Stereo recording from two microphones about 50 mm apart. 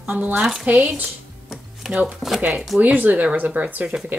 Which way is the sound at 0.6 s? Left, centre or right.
Right.